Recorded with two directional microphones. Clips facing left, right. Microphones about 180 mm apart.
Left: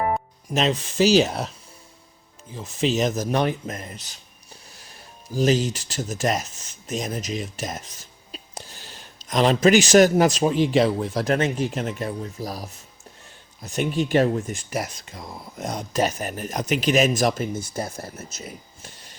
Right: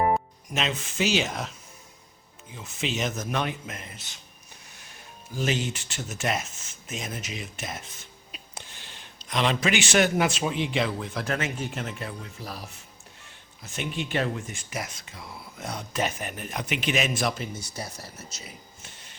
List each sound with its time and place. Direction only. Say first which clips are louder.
0.5 s speech: left 7 dB; 35° left (ahead or behind)
5.3 s speech: left 8 dB; 40° left (ahead or behind)